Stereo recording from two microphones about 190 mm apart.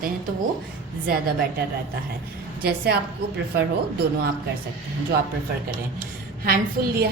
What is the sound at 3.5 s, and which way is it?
Speech, 55° right (ahead or behind).